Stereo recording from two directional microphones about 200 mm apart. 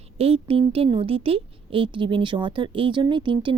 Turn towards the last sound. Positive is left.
turn(degrees=-25)  # may be behind; listen again after turning